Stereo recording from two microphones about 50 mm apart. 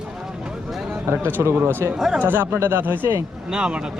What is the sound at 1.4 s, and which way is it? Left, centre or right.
Speech, right.